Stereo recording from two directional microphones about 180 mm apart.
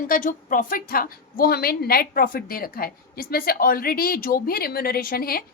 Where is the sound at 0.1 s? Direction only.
45° left (ahead or behind).